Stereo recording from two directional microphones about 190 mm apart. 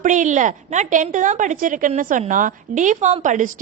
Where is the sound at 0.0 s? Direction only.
40° right (ahead or behind).